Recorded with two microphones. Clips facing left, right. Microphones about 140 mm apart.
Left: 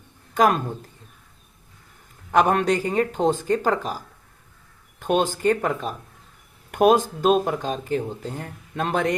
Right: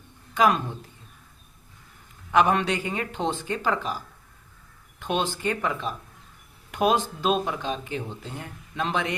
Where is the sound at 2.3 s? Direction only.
45° left (ahead or behind).